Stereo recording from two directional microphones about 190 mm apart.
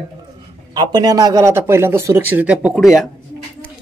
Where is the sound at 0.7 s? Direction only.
20° right (ahead or behind); by 3.1 s centre (ahead or behind).